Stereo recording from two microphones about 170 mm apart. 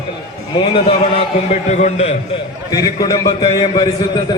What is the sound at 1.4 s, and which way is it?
Speech, 45° left (ahead or behind).